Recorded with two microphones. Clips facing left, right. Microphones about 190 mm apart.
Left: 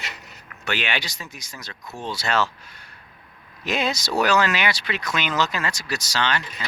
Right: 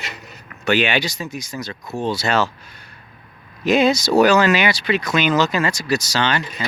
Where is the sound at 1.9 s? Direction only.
40° right (ahead or behind).